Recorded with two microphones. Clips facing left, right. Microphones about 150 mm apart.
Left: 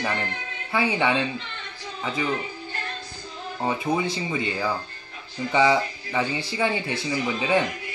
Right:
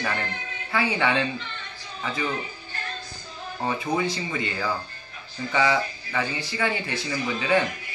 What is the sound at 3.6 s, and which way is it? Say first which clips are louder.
Speech: left 1 dB; 15° left (ahead or behind).